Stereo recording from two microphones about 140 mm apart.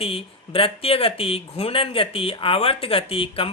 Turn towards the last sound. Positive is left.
turn(degrees=40)  # may be behind; listen again after turning